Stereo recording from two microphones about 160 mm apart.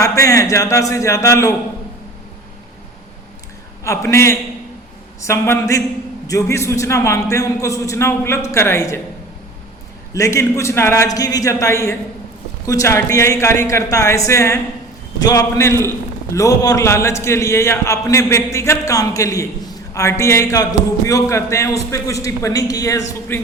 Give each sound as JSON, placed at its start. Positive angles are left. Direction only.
{"t": 0.0, "sound": "a man's voice", "side_deg": 20}
{"t": 3.8, "sound": "a man's voice", "side_deg": 15}
{"t": 10.2, "sound": "a man's voice", "side_deg": 20}